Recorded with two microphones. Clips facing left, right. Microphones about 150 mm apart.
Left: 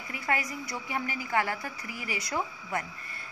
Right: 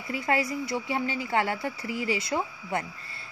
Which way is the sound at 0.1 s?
30° right (ahead or behind).